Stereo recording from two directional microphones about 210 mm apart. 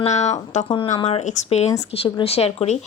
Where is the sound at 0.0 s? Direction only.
35° left (ahead or behind).